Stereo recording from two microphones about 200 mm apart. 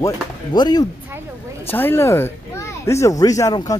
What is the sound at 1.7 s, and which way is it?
Speech, 10° left (ahead or behind).